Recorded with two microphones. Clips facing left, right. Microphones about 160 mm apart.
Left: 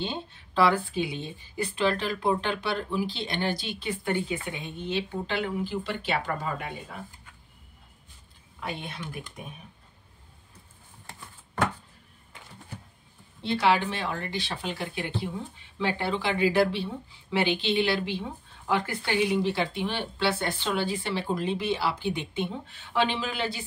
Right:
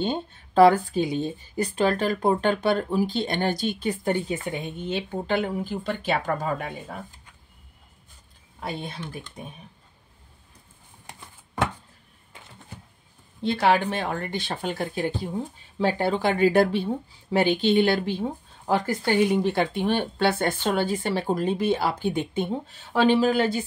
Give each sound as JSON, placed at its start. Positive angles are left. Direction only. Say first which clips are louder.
{"t": 0.0, "sound": "speech", "louder": "right 6 dB", "side_deg": -50}
{"t": 8.5, "sound": "speech", "louder": "right 3 dB", "side_deg": -35}
{"t": 11.1, "sound": "a sound", "louder": "right 1 dB", "side_deg": -20}
{"t": 13.4, "sound": "speech", "louder": "right 3 dB", "side_deg": -50}